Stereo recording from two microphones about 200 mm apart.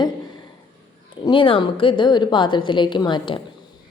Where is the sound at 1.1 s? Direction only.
25° left (ahead or behind).